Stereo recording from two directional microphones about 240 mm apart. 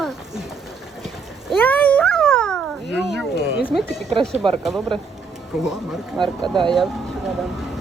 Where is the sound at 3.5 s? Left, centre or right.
Centre.